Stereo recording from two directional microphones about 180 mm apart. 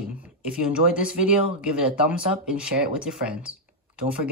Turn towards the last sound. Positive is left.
turn(degrees=-5)  # may be behind; listen again after turning